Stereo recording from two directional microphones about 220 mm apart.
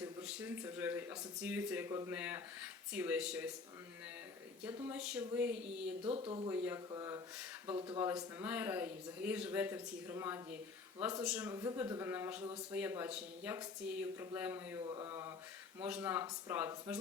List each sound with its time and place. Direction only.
0.0 s speech: 5° right (ahead or behind)
4.6 s speech: 10° right (ahead or behind)
6.0 s speech: 25° right (ahead or behind)
6.5 s speech: 10° right (ahead or behind)
8.0 s speech: 10° right (ahead or behind)
14.8 s speech: 20° right (ahead or behind)